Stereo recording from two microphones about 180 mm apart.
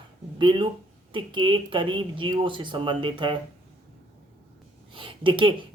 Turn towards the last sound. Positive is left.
turn(degrees=-25)  # may be behind; listen again after turning